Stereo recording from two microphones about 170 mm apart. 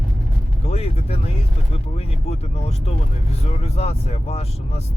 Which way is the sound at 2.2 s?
40° left (ahead or behind).